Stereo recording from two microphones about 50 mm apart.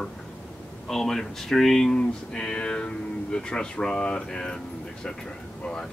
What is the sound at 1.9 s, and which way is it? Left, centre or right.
Speech, centre.